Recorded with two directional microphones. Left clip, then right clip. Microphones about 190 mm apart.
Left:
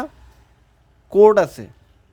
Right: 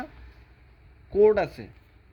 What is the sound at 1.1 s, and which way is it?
Speech, 70° left (ahead or behind).